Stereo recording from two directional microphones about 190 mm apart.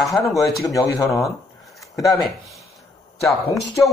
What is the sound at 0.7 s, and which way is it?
Speech, 15° left (ahead or behind).